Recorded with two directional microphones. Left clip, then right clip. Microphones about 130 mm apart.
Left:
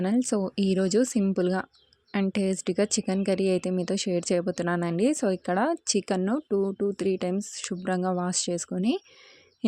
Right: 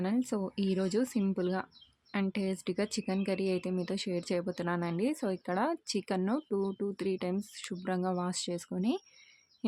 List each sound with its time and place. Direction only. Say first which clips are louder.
0.0 s a woman's voice: left 7 dB; 45° left (ahead or behind)
6.3 s speech: left 7 dB; 30° left (ahead or behind)